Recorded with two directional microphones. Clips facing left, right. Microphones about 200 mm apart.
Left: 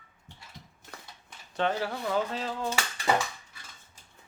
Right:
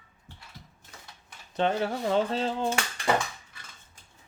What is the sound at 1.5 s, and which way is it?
Speech, 20° right (ahead or behind).